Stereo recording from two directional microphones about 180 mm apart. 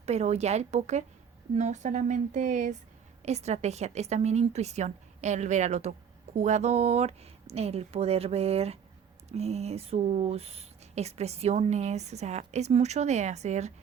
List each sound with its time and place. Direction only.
0.0 s speech: 35° right (ahead or behind)